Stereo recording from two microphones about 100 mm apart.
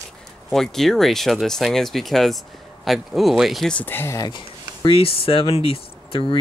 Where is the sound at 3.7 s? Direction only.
20° left (ahead or behind).